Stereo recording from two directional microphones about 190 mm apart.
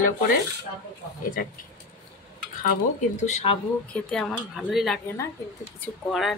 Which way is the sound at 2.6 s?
40° left (ahead or behind).